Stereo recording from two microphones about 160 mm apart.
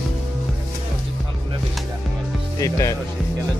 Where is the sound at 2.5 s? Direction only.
20° left (ahead or behind).